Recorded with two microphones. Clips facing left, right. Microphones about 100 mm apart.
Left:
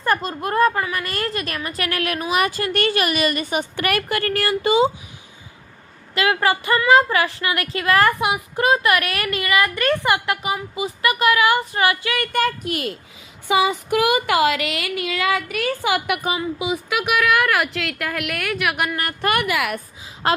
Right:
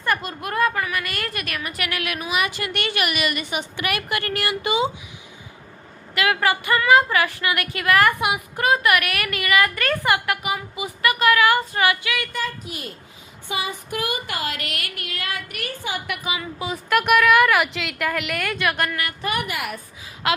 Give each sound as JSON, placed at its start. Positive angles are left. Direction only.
{"t": 0.0, "sound": "a woman's voice", "side_deg": 30}
{"t": 6.1, "sound": "a woman's voice", "side_deg": 30}
{"t": 12.1, "sound": "speech", "side_deg": 55}
{"t": 13.5, "sound": "a sound", "side_deg": 90}
{"t": 15.8, "sound": "a woman's voice", "side_deg": 80}
{"t": 16.4, "sound": "speech", "side_deg": 15}
{"t": 16.9, "sound": "a woman's voice", "side_deg": 5}
{"t": 19.2, "sound": "a woman's voice", "side_deg": 75}
{"t": 20.2, "sound": "a woman's voice", "side_deg": 35}